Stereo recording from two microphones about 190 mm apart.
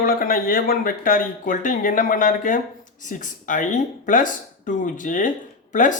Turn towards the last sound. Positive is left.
turn(degrees=40)  # may be behind; listen again after turning